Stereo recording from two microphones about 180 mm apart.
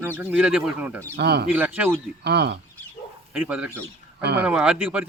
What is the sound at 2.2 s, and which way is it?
Speech, 70° right (ahead or behind).